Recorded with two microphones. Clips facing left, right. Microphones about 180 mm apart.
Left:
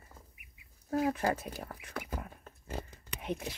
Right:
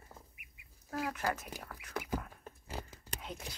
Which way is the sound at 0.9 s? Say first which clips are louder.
Left 6 dB; 30° left (ahead or behind).